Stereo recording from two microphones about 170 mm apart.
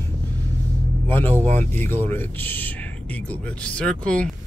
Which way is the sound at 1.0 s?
15° left (ahead or behind).